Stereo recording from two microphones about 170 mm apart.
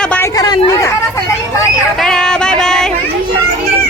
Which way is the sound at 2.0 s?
5° left (ahead or behind).